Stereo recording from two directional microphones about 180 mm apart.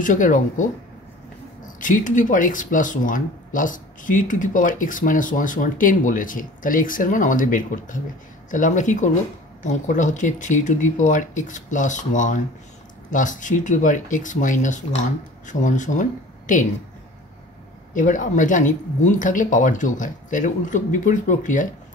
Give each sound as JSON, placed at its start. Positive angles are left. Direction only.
{"t": 0.0, "sound": "speech", "side_deg": 45}
{"t": 17.9, "sound": "speech", "side_deg": 45}